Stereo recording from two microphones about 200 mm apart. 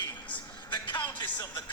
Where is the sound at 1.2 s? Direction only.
20° left (ahead or behind).